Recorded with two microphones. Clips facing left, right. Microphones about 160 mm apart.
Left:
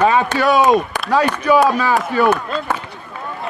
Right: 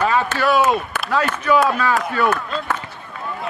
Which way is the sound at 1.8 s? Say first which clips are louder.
Left 3 dB; 5° left (ahead or behind).